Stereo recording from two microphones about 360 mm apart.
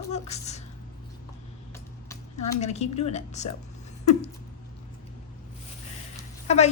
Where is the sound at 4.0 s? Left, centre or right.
Centre.